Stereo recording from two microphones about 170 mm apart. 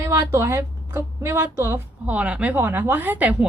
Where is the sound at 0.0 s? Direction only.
15° right (ahead or behind).